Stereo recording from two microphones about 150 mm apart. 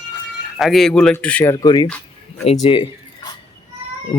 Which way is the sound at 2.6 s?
35° left (ahead or behind).